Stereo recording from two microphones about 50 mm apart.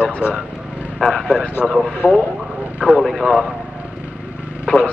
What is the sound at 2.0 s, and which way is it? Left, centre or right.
Speech, right.